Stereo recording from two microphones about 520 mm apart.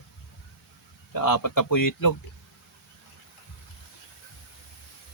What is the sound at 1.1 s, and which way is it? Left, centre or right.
Speech, left.